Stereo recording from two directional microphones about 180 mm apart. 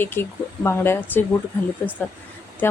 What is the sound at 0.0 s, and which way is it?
A woman's voice, 10° left (ahead or behind).